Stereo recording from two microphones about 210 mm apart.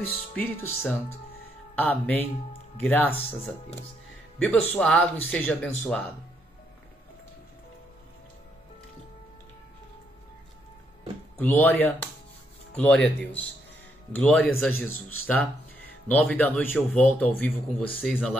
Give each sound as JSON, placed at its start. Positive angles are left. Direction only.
{"t": 0.4, "sound": "speech", "side_deg": 10}
{"t": 4.4, "sound": "speech", "side_deg": 5}
{"t": 11.3, "sound": "speech", "side_deg": 10}